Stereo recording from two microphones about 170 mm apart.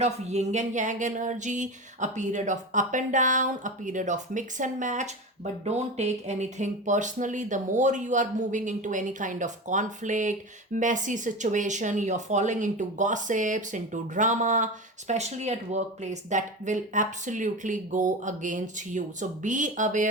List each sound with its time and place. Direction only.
0.0 s speech: 40° right (ahead or behind)